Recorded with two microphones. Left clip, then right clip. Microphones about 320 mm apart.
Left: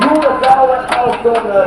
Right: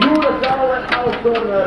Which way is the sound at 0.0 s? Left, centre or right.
Left.